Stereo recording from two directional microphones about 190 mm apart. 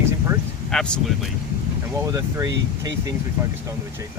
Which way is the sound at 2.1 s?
20° right (ahead or behind).